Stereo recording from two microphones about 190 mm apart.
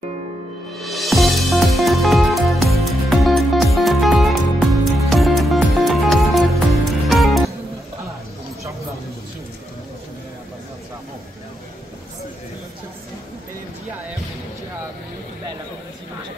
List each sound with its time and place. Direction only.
0.7 s music: centre (ahead or behind)